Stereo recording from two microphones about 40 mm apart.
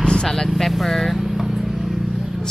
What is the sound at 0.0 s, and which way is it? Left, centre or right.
Vehicle, centre.